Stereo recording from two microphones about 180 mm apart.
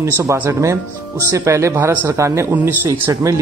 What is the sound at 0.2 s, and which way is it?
Speech, 15° right (ahead or behind).